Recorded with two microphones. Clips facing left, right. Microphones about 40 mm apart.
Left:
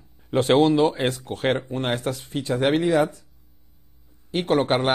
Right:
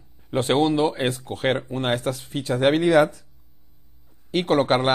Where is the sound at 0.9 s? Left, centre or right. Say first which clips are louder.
Even; right.